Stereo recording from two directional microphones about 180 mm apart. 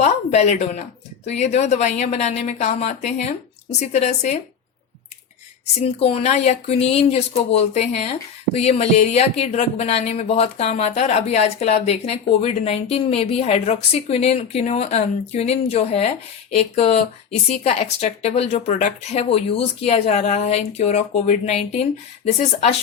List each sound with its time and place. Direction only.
0.0 s speech: 40° left (ahead or behind)
5.8 s speech: 35° left (ahead or behind)